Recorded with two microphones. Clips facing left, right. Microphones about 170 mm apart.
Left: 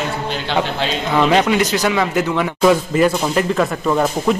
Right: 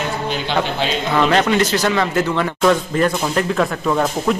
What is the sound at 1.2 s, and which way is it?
A man's voice, 10° left (ahead or behind).